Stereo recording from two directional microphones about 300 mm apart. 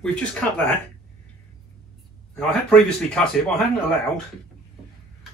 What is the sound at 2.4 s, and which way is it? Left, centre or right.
A man's voice, centre.